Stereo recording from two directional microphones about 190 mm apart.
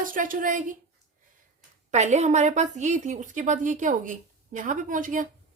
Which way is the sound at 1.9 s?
40° right (ahead or behind).